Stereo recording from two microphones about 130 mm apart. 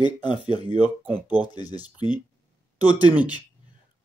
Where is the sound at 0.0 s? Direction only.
35° left (ahead or behind).